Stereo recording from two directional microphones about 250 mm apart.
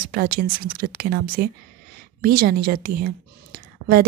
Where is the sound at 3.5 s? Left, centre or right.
Right.